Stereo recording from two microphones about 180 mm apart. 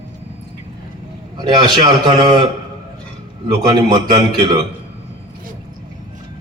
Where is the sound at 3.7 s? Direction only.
25° right (ahead or behind).